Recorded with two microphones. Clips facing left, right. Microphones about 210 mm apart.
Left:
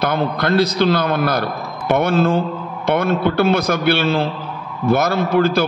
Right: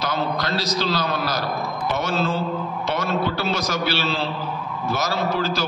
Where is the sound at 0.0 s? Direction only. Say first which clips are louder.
Left 6 dB; 55° left (ahead or behind).